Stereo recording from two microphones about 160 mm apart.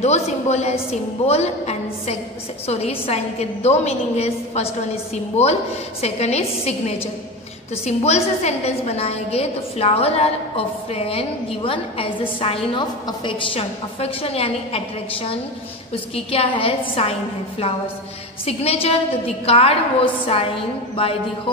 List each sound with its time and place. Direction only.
0.0 s a woman's voice: 45° left (ahead or behind)
18.4 s a woman's voice: 40° left (ahead or behind)